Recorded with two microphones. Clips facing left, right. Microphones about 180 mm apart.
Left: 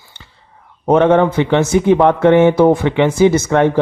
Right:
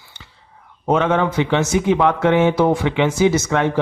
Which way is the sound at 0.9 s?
55° left (ahead or behind).